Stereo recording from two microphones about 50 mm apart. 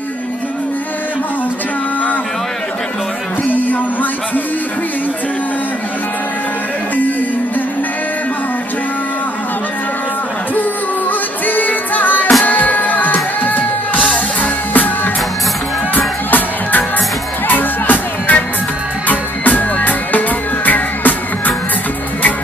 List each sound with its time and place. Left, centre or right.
3.6 s music: left
10.5 s music: left
13.9 s music: left
14.4 s music: left
16.3 s music: left